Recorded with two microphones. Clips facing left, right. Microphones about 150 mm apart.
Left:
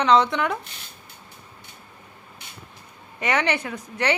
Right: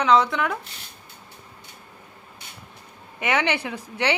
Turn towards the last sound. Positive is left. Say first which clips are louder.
# even
turn(degrees=-10)  # may be behind; listen again after turning